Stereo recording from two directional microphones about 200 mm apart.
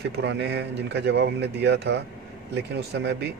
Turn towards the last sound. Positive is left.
turn(degrees=-55)  # may be behind; listen again after turning